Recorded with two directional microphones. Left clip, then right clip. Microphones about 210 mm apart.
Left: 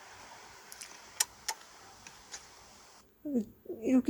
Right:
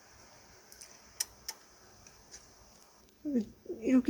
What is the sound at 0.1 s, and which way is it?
Vehicle, 10° left (ahead or behind).